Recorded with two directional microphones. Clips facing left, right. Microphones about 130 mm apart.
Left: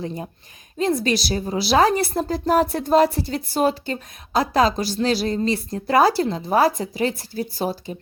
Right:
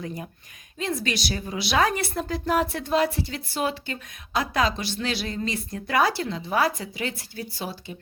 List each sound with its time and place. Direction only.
0.0 s a woman's voice: 30° left (ahead or behind)